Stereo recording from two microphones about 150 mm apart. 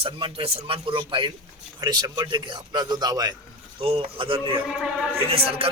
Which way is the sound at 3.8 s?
35° right (ahead or behind).